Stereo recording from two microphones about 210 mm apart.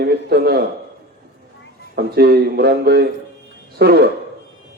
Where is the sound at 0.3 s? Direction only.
50° right (ahead or behind).